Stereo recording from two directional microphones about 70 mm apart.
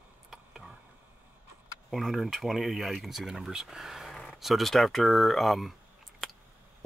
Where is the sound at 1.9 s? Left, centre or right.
Centre.